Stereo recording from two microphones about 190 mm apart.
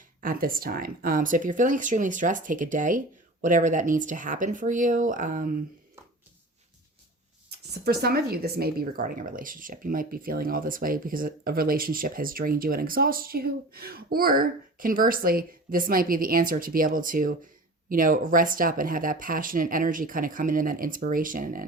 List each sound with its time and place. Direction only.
0.2 s speech: 50° right (ahead or behind)
7.7 s speech: 55° right (ahead or behind)